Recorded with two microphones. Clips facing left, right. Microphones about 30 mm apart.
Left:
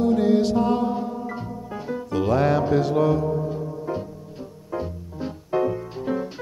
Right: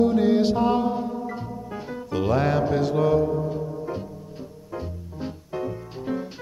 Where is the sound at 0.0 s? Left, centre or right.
Centre.